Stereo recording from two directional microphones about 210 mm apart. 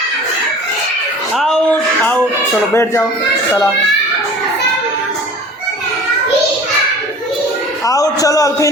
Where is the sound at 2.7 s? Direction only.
10° left (ahead or behind).